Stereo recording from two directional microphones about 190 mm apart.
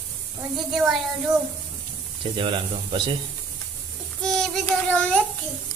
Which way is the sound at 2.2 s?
25° right (ahead or behind).